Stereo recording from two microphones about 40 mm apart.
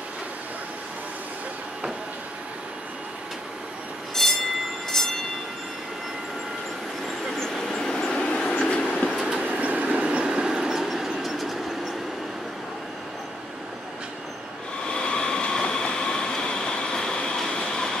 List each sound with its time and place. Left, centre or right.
4.1 s train: centre
7.3 s vehicle: centre
7.9 s train: left
9.5 s train: right; by 10.8 s centre
10.8 s train: centre
14.9 s train: left